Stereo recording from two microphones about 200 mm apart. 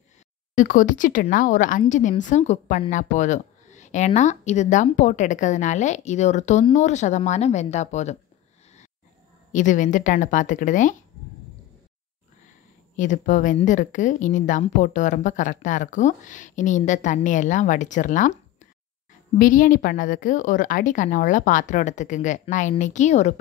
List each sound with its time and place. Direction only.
0.6 s a woman's voice: 40° left (ahead or behind)
9.5 s a woman's voice: 40° left (ahead or behind)
12.9 s a woman's voice: 40° left (ahead or behind)
19.3 s a woman's voice: 40° left (ahead or behind)